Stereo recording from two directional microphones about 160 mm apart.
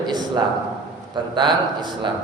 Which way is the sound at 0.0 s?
25° right (ahead or behind).